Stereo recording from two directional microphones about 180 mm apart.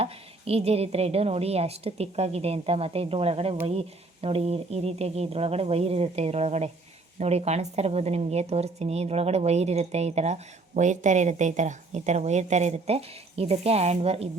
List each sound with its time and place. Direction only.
0.0 s speech: 35° right (ahead or behind)